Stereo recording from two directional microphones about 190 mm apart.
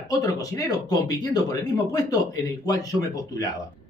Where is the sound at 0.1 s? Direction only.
20° left (ahead or behind).